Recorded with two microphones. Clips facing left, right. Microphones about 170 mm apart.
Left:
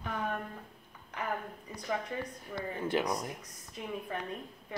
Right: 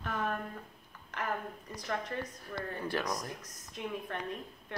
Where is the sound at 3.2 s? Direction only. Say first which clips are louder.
Left 2 dB; 5° left (ahead or behind).